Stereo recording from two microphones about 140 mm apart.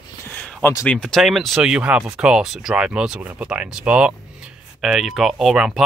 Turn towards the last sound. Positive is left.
turn(degrees=-5)  # may be behind; listen again after turning